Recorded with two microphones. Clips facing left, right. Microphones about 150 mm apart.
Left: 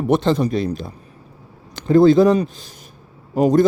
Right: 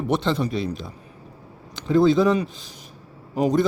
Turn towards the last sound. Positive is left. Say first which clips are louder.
# left 5 dB
turn(degrees=45)  # may be behind; listen again after turning